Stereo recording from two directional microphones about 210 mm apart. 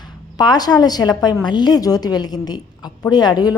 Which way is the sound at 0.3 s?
20° left (ahead or behind).